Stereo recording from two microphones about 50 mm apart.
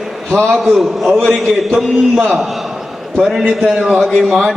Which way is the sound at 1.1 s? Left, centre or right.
Centre.